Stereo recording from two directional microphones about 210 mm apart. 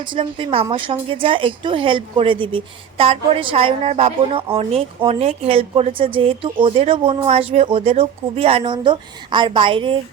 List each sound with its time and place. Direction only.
0.0 s a woman's voice: 25° right (ahead or behind)